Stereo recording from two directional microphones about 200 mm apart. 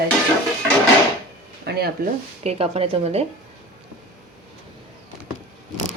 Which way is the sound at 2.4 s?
30° right (ahead or behind).